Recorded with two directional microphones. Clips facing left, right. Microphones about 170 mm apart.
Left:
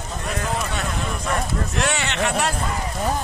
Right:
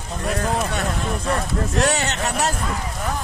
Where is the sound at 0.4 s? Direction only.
40° right (ahead or behind).